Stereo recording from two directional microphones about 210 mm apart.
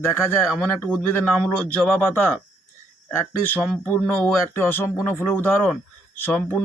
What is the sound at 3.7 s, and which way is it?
Speech, 10° left (ahead or behind).